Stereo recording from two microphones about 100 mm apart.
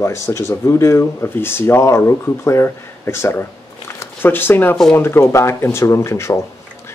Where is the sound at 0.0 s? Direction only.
30° left (ahead or behind).